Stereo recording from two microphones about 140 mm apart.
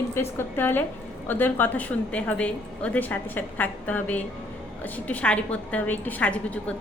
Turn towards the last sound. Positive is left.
turn(degrees=10)  # may be behind; listen again after turning